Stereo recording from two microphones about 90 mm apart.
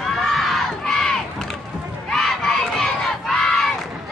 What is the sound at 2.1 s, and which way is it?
Crowd, 5° left (ahead or behind).